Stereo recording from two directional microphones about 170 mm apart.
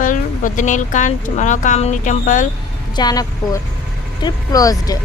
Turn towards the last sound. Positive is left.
turn(degrees=20)  # may be behind; listen again after turning